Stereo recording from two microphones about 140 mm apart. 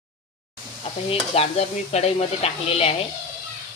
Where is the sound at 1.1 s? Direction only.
45° left (ahead or behind).